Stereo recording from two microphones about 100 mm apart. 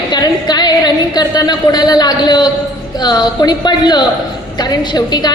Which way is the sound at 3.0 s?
45° left (ahead or behind).